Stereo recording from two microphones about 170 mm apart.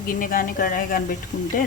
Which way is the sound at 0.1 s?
55° left (ahead or behind).